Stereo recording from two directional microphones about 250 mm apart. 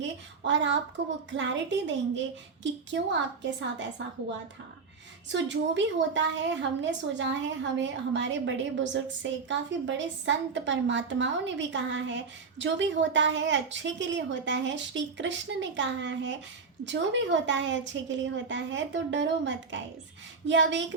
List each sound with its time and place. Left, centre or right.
0.0 s a woman's voice: right
5.3 s a woman's voice: right